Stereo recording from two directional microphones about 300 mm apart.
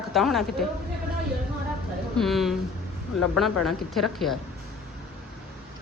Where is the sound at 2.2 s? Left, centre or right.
Centre.